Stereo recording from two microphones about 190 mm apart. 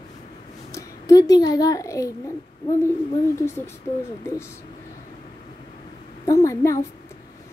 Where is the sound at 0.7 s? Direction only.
20° left (ahead or behind).